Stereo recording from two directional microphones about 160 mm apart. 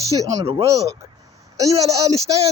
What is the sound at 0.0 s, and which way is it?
Speech, 20° left (ahead or behind).